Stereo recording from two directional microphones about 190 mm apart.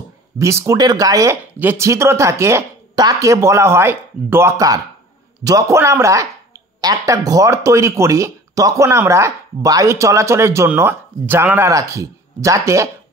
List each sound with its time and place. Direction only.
0.4 s a man's voice: 15° right (ahead or behind)